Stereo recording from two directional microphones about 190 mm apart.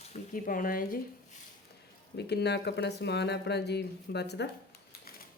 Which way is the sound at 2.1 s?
60° left (ahead or behind).